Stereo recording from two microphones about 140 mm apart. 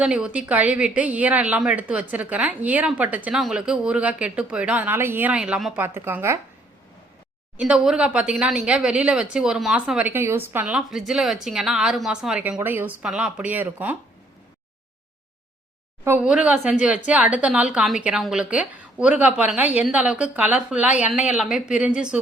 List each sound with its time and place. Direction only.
0.0 s a woman's voice: 10° right (ahead or behind)
5.8 s a woman's voice: 15° right (ahead or behind)
7.5 s a woman's voice: 10° right (ahead or behind)
16.0 s a woman's voice: 10° right (ahead or behind)